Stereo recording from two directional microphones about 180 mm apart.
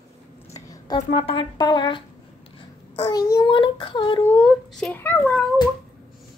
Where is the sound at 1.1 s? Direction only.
30° left (ahead or behind).